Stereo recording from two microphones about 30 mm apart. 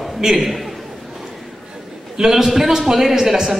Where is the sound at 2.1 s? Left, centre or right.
Centre.